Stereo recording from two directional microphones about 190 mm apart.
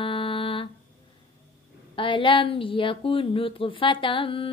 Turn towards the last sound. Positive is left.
turn(degrees=30)  # may be behind; listen again after turning